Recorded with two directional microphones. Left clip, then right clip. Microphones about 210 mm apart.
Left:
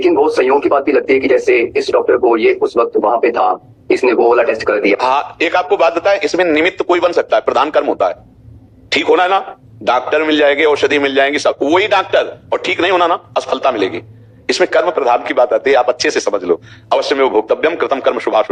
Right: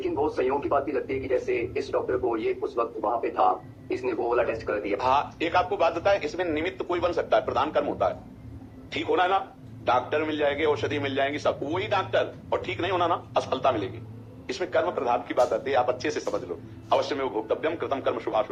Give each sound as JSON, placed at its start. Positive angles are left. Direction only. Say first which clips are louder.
{"t": 0.0, "sound": "a man's voice", "louder": "left 15 dB", "side_deg": 40}